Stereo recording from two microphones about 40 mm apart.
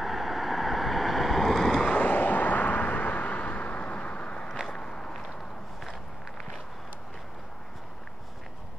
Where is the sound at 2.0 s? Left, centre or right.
Left.